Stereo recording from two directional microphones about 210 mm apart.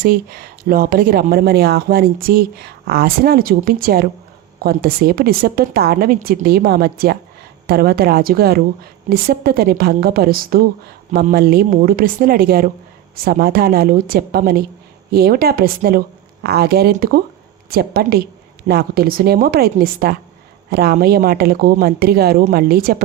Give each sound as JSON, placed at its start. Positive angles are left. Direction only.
{"t": 0.0, "sound": "speech", "side_deg": -45}